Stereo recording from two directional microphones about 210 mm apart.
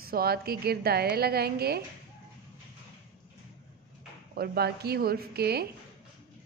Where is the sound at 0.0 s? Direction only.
45° right (ahead or behind).